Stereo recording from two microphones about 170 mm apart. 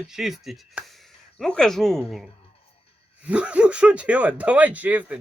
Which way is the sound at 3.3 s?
5° right (ahead or behind).